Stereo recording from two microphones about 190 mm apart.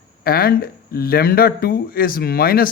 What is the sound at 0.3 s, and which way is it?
Speech, 50° left (ahead or behind).